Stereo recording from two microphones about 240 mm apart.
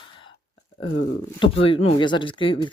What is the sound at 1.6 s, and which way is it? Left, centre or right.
Speech, left.